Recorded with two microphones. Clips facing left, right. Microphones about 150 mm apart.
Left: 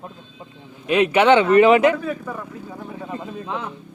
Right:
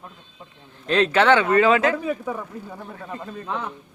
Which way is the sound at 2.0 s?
10° right (ahead or behind).